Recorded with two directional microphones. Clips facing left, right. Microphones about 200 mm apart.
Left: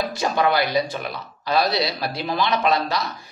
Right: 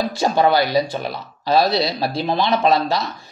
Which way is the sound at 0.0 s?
30° right (ahead or behind).